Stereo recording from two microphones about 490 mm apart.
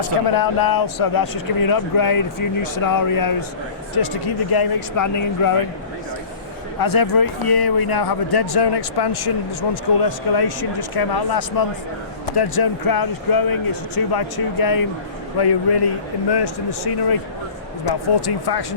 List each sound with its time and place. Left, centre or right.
0.3 s speech: left
6.7 s speech: left